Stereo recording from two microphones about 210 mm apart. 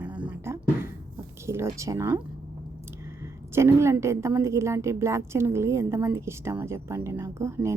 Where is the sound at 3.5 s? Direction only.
15° right (ahead or behind).